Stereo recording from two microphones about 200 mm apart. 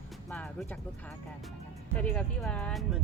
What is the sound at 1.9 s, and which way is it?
Speech, 5° left (ahead or behind).